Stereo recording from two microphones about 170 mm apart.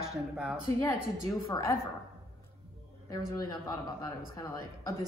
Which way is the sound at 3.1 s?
20° left (ahead or behind).